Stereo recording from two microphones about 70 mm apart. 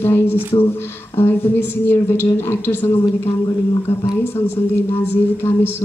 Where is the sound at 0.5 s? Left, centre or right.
Left.